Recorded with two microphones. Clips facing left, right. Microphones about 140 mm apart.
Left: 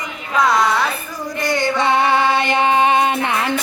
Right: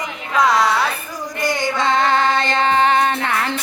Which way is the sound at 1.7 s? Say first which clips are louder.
Left 1 dB; 15° left (ahead or behind).